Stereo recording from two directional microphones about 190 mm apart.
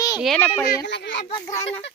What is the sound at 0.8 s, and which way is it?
Children playing, 65° left (ahead or behind).